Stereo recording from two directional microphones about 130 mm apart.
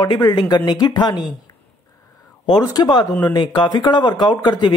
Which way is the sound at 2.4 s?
30° left (ahead or behind).